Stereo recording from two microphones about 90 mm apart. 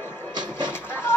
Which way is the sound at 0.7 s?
25° left (ahead or behind).